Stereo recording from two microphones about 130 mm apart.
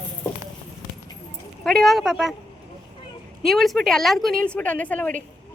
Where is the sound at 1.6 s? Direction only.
5° left (ahead or behind).